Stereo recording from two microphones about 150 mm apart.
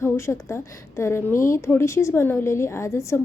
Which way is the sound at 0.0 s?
15° left (ahead or behind).